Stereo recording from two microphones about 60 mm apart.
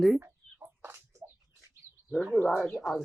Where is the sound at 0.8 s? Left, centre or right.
Right.